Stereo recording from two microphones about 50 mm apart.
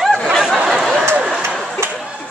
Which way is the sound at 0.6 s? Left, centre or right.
Centre.